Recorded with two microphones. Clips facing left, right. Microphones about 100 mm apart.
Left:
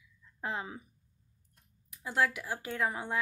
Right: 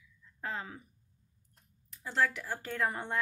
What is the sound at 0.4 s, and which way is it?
Speech, 15° left (ahead or behind).